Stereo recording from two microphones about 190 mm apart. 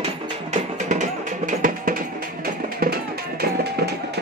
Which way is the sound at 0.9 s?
40° right (ahead or behind).